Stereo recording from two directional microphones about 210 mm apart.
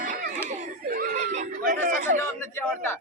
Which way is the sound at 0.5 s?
40° right (ahead or behind).